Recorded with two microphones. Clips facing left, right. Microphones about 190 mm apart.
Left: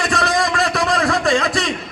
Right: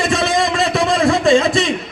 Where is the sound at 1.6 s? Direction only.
Centre (ahead or behind).